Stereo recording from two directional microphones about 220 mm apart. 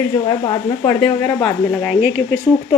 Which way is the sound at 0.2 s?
20° left (ahead or behind).